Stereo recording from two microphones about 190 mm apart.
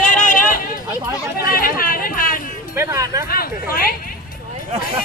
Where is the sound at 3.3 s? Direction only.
50° left (ahead or behind).